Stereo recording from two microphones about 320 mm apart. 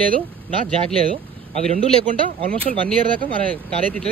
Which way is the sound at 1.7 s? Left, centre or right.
Centre.